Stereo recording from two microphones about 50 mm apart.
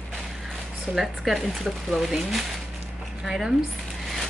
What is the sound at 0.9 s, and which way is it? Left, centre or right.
Speech, centre.